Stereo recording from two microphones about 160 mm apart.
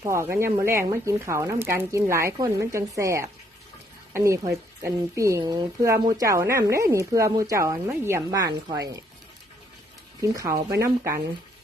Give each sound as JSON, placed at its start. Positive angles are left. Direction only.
{"t": 0.0, "sound": "speech", "side_deg": -15}
{"t": 10.2, "sound": "speech", "side_deg": -20}